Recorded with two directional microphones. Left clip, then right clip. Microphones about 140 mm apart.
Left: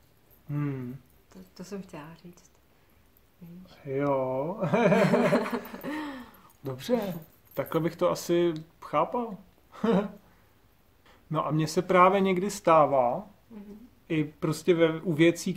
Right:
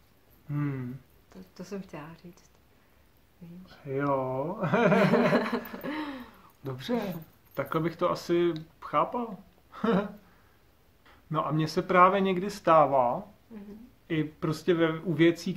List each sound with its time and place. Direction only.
0.5 s a sound: 25° left (ahead or behind)
1.3 s chuckle: 5° right (ahead or behind)
3.8 s speech: 20° left (ahead or behind)
4.9 s chuckle: 5° right (ahead or behind)
6.6 s speech: 30° left (ahead or behind)
11.1 s speech: 30° left (ahead or behind)